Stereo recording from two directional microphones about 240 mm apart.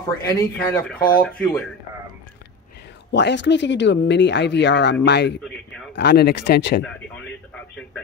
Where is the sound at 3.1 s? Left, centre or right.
Left.